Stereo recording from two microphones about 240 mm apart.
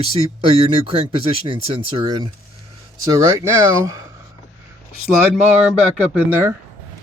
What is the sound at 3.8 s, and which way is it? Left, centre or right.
Speech, centre.